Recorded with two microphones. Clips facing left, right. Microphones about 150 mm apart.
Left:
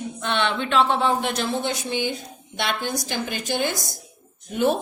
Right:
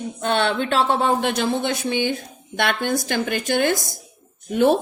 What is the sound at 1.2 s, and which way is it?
Speech, 60° right (ahead or behind).